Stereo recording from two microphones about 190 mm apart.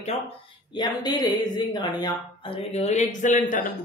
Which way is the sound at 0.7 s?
20° left (ahead or behind).